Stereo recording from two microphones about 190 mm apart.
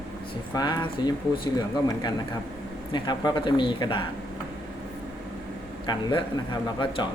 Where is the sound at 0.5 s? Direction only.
20° left (ahead or behind).